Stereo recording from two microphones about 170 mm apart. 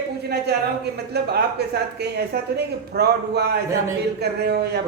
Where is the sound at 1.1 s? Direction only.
75° right (ahead or behind).